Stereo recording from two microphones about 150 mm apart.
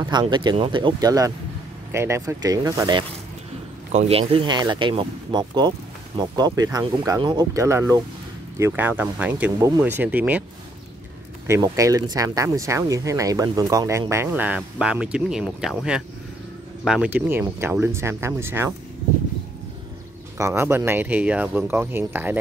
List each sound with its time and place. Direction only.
0.1 s speech: 30° right (ahead or behind)
3.9 s speech: 45° right (ahead or behind); by 10.4 s 10° right (ahead or behind)
11.4 s speech: 20° right (ahead or behind); by 15.7 s 5° right (ahead or behind)
16.8 s speech: 5° right (ahead or behind)
20.3 s speech: 20° right (ahead or behind)